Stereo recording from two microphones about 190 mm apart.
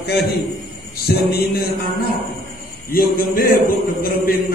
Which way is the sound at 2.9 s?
50° left (ahead or behind).